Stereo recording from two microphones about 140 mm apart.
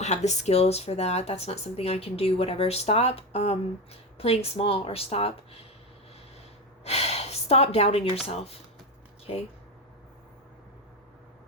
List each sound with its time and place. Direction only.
0.0 s speech: 55° left (ahead or behind)
6.8 s gasp: 50° left (ahead or behind)
8.3 s speech: 50° left (ahead or behind)